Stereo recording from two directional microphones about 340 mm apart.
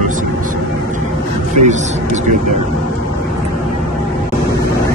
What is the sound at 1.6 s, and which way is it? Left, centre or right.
Speech, right.